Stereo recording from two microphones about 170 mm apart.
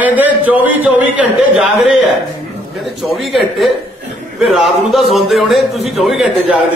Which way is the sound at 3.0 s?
Centre (ahead or behind).